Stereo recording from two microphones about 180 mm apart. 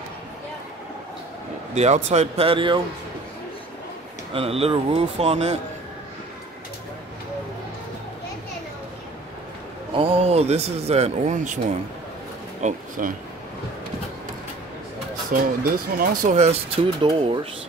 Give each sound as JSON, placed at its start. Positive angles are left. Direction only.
{"t": 1.8, "sound": "speech", "side_deg": -40}
{"t": 4.3, "sound": "speech", "side_deg": -30}
{"t": 9.9, "sound": "speech", "side_deg": -30}
{"t": 12.6, "sound": "speech", "side_deg": -50}
{"t": 15.3, "sound": "speech", "side_deg": -50}